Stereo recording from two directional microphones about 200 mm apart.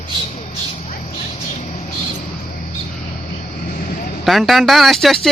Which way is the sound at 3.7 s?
45° left (ahead or behind).